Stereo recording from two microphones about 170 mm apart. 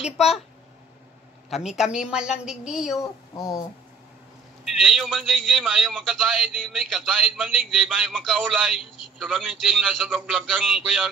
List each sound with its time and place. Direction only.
0.0 s a man's voice: 5° right (ahead or behind)
1.5 s a man's voice: centre (ahead or behind)
3.0 s speech: 20° left (ahead or behind)
4.6 s a man's voice: 5° right (ahead or behind)